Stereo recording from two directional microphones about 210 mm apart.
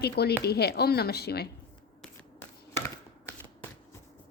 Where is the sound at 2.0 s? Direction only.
10° left (ahead or behind).